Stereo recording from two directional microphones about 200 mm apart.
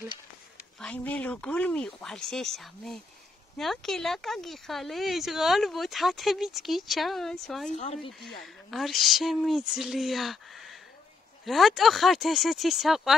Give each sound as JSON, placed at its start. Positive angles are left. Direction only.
{"t": 0.7, "sound": "speech", "side_deg": 5}
{"t": 7.7, "sound": "speech", "side_deg": 35}
{"t": 8.6, "sound": "speech", "side_deg": 0}